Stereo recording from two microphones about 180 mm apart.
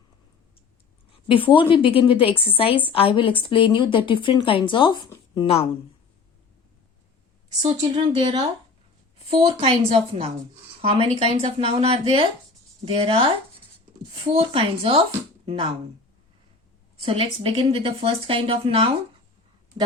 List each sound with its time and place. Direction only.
1.3 s a woman's voice: 30° left (ahead or behind)
7.6 s speech: 35° right (ahead or behind)
17.0 s speech: 30° right (ahead or behind)